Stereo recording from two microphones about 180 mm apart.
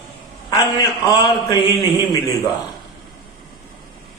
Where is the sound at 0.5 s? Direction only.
20° left (ahead or behind).